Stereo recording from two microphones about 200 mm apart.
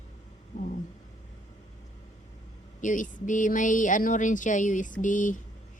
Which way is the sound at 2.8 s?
40° left (ahead or behind).